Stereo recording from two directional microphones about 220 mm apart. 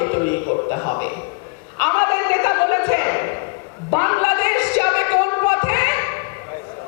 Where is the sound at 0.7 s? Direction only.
15° left (ahead or behind).